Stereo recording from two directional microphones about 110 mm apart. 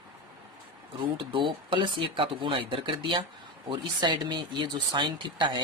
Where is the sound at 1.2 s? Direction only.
50° right (ahead or behind).